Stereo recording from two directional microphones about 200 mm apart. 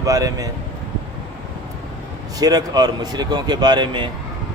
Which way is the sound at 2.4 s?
20° right (ahead or behind).